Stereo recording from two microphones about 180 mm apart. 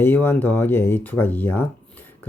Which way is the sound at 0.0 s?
10° left (ahead or behind).